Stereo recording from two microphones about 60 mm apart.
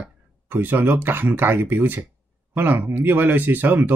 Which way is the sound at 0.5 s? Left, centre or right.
Right.